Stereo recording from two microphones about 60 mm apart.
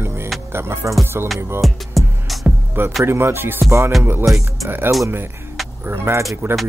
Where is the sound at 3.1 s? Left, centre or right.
Right.